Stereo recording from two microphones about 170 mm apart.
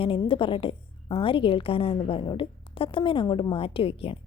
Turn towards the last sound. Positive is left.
turn(degrees=35)  # may be behind; listen again after turning